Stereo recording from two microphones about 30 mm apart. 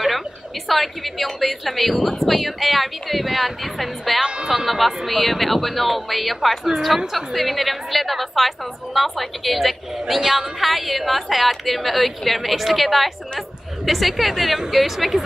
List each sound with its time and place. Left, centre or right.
0.7 s a woman's voice: centre
10.2 s speech: centre
10.6 s a woman's voice: centre